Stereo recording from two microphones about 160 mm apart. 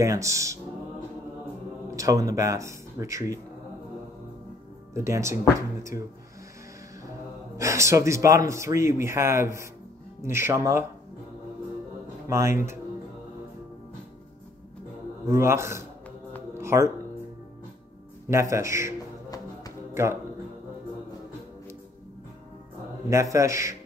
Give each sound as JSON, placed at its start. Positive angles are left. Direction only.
{"t": 0.0, "sound": "a man's voice", "side_deg": -20}
{"t": 1.9, "sound": "speech", "side_deg": -20}
{"t": 4.9, "sound": "speech", "side_deg": -20}
{"t": 7.5, "sound": "speech", "side_deg": -20}
{"t": 12.3, "sound": "speech", "side_deg": -15}
{"t": 15.2, "sound": "speech", "side_deg": -15}
{"t": 16.5, "sound": "music", "side_deg": -15}
{"t": 18.3, "sound": "speech", "side_deg": -20}
{"t": 23.0, "sound": "a man's voice", "side_deg": -20}